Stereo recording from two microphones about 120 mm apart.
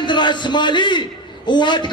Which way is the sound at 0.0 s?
40° left (ahead or behind).